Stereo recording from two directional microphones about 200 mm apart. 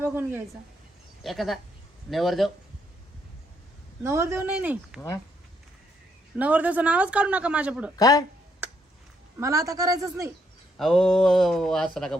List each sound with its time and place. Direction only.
0.0 s a woman's voice: 10° right (ahead or behind)
1.2 s speech: centre (ahead or behind)
4.0 s speech: 10° right (ahead or behind)
4.9 s speech: 15° left (ahead or behind)
6.3 s speech: 5° right (ahead or behind)
7.9 s speech: 15° left (ahead or behind)
9.4 s speech: 15° right (ahead or behind)
10.8 s speech: centre (ahead or behind)